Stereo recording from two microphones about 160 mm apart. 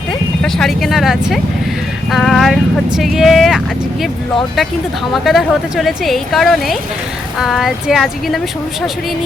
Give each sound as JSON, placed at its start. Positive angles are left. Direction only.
{"t": 0.4, "sound": "a woman's voice", "side_deg": 0}
{"t": 5.1, "sound": "a woman's voice", "side_deg": 0}